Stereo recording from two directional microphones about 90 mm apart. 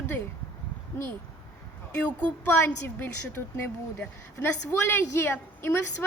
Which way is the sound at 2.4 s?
25° left (ahead or behind).